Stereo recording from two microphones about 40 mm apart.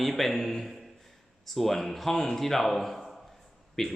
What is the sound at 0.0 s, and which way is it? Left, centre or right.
A man's voice, centre.